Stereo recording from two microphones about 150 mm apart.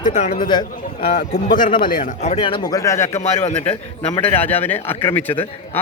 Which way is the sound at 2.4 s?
30° left (ahead or behind).